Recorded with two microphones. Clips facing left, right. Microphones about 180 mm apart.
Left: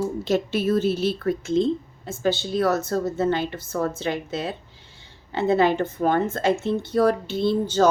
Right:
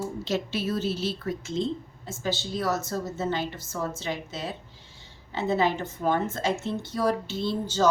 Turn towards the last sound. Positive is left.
turn(degrees=55)  # may be behind; listen again after turning